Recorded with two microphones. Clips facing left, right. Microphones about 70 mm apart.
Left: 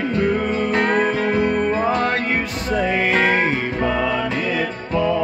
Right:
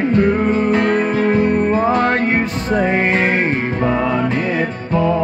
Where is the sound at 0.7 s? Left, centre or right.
Centre.